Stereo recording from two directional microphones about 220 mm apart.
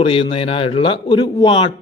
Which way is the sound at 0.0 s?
25° left (ahead or behind).